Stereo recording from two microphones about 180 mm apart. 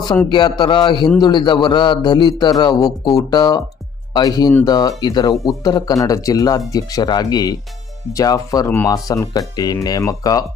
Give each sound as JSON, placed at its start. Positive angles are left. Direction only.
{"t": 0.3, "sound": "a man's voice", "side_deg": 25}